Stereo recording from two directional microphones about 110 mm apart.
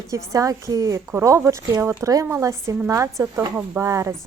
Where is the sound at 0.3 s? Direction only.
30° right (ahead or behind).